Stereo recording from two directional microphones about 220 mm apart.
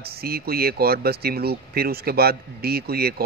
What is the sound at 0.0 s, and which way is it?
Speech, 45° right (ahead or behind).